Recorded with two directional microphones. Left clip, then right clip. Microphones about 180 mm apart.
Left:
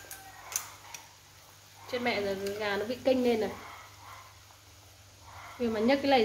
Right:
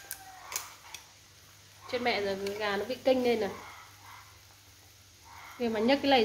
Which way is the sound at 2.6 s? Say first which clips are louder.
Even; 10° right (ahead or behind).